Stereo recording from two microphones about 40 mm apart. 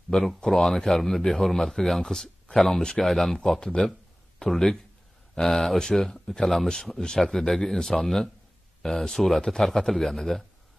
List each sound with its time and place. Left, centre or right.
0.4 s a man's voice: centre
3.1 s a man's voice: centre
3.3 s a man's voice: centre
6.4 s a man's voice: centre